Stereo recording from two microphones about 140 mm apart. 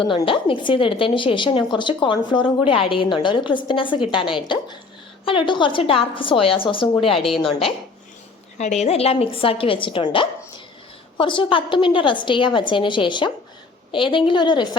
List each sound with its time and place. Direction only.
0.0 s a woman's voice: 35° left (ahead or behind)
5.2 s a woman's voice: 40° left (ahead or behind)
8.5 s a woman's voice: 55° left (ahead or behind); by 14.8 s 30° left (ahead or behind)